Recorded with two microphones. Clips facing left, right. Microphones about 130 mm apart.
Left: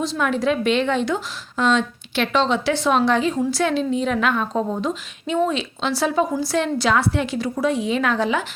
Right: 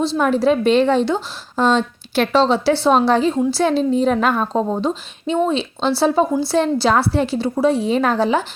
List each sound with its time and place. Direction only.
0.0 s a woman's voice: 35° right (ahead or behind)